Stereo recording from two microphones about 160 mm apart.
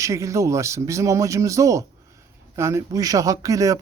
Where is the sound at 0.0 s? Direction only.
20° right (ahead or behind).